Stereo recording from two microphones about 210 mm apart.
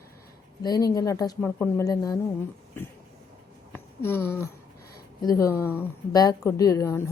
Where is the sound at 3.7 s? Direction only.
10° left (ahead or behind).